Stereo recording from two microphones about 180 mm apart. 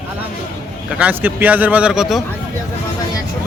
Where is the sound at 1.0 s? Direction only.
10° right (ahead or behind).